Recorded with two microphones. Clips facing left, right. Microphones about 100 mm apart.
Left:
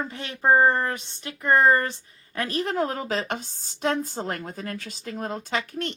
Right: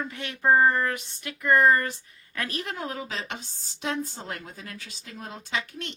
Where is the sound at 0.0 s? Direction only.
30° left (ahead or behind).